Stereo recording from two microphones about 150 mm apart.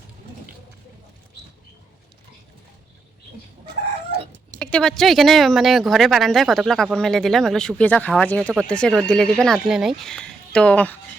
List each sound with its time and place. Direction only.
4.6 s speech: 5° left (ahead or behind)